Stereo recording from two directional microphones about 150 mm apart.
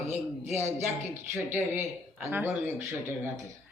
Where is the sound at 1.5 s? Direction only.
15° right (ahead or behind).